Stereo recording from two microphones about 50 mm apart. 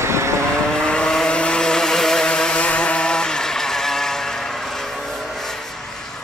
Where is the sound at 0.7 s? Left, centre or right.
Centre.